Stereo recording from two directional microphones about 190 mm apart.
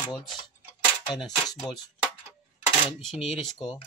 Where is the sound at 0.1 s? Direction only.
Centre (ahead or behind).